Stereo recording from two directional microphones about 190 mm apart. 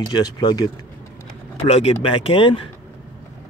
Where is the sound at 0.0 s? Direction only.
20° left (ahead or behind).